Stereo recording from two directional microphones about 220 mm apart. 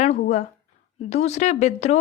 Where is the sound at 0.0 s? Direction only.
30° left (ahead or behind).